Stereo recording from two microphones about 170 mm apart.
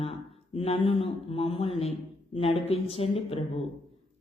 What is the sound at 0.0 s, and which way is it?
A man's voice, 35° left (ahead or behind).